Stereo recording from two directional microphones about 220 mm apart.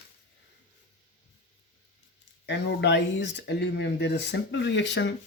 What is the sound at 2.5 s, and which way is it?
Speech, 50° left (ahead or behind).